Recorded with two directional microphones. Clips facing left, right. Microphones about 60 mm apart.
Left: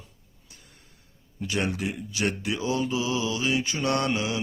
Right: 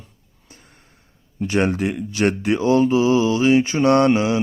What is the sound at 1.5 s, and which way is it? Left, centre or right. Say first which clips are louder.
Speech: right 9 dB; right.